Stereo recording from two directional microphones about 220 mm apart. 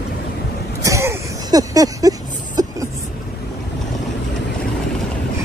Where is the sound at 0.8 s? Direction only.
15° right (ahead or behind).